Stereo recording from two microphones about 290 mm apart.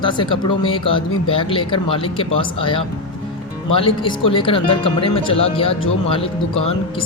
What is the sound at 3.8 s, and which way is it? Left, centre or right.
Speech, centre.